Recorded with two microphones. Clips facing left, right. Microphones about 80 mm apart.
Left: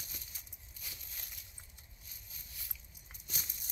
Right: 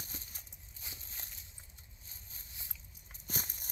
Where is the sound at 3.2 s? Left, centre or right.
Right.